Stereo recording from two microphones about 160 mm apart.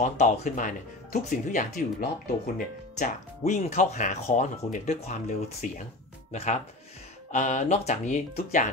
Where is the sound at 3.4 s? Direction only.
45° left (ahead or behind).